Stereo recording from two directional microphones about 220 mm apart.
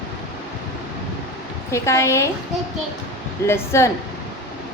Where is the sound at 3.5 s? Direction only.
10° left (ahead or behind).